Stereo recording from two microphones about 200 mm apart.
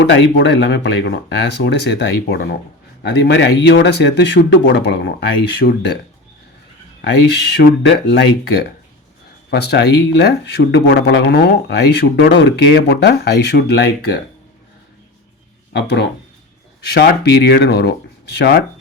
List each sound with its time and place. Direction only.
0.1 s speech: 60° left (ahead or behind)
7.5 s speech: 60° left (ahead or behind)
9.5 s speech: 55° left (ahead or behind)
15.7 s speech: 55° left (ahead or behind)